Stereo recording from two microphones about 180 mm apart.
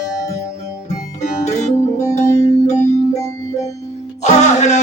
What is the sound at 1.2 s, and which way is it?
Music, 40° left (ahead or behind).